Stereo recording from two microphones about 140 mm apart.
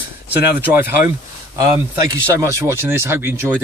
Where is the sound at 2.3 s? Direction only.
20° right (ahead or behind).